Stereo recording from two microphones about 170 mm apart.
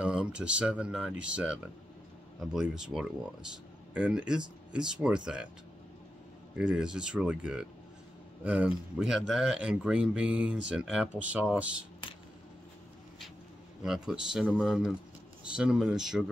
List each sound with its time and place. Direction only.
0.0 s speech: 5° right (ahead or behind)
6.6 s speech: 5° right (ahead or behind)
13.8 s speech: 5° right (ahead or behind)